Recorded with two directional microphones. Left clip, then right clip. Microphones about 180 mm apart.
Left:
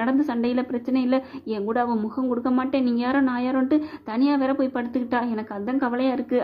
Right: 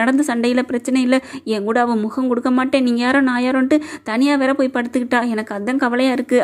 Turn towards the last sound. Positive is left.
turn(degrees=-35)  # may be behind; listen again after turning